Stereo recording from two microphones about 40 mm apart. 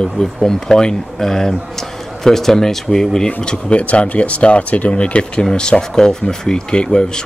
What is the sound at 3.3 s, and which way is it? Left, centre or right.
Speech, left.